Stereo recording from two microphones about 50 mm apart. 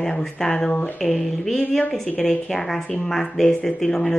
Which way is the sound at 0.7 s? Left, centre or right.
Left.